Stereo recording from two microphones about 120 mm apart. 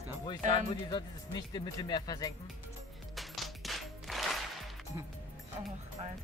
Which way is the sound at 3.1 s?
Centre (ahead or behind).